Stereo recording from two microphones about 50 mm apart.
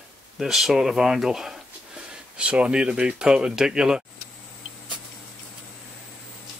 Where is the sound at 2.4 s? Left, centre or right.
Right.